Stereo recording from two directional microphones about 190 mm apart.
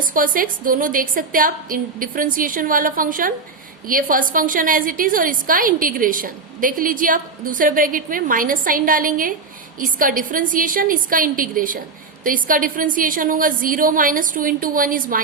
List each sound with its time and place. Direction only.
0.0 s a woman's voice: 45° right (ahead or behind)